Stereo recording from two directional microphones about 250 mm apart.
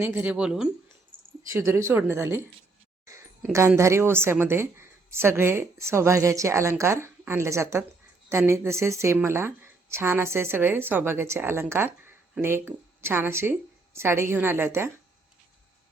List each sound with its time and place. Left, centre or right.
0.0 s speech: centre
1.1 s a sound: right
1.5 s speech: centre
3.5 s speech: centre